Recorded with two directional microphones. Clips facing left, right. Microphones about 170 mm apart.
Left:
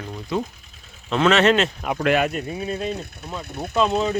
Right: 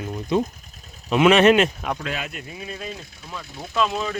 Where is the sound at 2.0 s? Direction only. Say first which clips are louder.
Left 11 dB; 60° left (ahead or behind).